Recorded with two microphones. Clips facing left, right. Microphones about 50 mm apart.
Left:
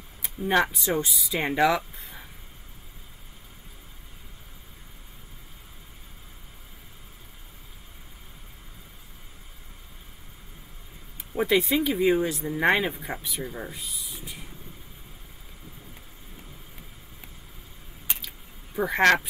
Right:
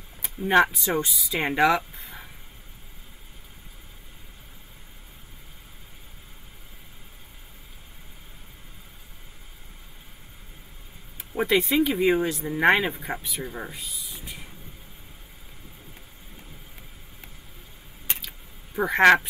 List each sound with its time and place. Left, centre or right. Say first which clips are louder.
0.7 s speech: right 1 dB; centre
11.3 s speech: right 1 dB; centre
18.8 s speech: right 3 dB; centre